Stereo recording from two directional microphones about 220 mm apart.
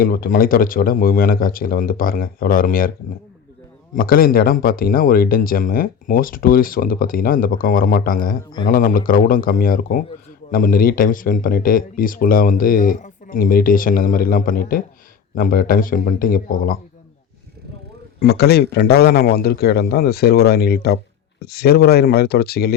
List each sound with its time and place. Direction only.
0.0 s speech: 40° left (ahead or behind)
3.9 s speech: 40° left (ahead or behind)
18.2 s a man's voice: 45° left (ahead or behind)